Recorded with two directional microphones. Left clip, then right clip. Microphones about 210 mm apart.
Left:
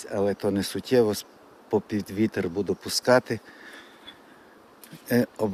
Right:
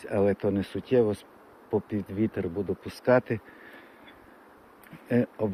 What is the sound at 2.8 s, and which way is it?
Speech, 15° left (ahead or behind).